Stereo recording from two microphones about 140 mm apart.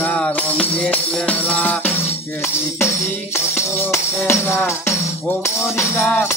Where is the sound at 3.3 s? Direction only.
15° left (ahead or behind).